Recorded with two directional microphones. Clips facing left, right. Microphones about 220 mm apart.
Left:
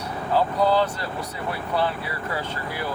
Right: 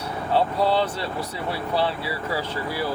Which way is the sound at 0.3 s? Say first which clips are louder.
Left 1 dB; 30° right (ahead or behind).